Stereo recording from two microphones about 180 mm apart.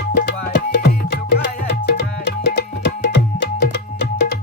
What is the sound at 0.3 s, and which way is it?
Music, 70° left (ahead or behind).